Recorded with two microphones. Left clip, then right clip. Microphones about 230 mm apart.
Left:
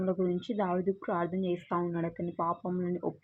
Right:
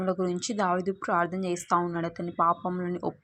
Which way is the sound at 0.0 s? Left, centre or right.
Centre.